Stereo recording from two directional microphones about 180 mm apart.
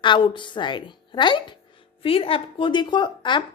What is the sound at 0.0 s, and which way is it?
A woman's voice, 25° left (ahead or behind).